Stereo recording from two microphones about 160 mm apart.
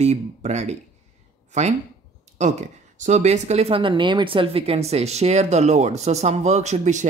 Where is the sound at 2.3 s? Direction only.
45° right (ahead or behind).